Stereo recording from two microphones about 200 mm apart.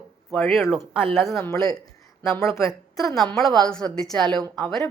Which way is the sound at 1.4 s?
15° left (ahead or behind).